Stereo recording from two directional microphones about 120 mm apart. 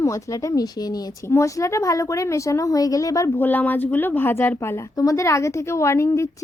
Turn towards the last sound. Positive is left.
turn(degrees=25)  # may be behind; listen again after turning